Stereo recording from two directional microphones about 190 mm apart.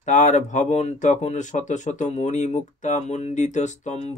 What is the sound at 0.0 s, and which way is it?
Speech, 40° left (ahead or behind).